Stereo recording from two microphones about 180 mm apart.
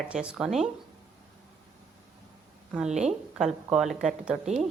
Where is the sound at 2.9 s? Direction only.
40° right (ahead or behind).